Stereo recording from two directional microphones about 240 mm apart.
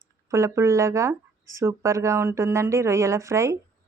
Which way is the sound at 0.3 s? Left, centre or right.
Centre.